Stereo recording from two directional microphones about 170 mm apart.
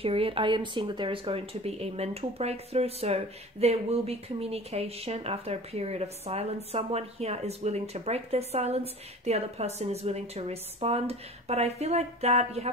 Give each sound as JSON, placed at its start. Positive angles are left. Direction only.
{"t": 0.0, "sound": "speech", "side_deg": -35}